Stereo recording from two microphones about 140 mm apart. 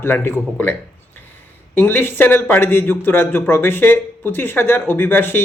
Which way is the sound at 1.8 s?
15° left (ahead or behind).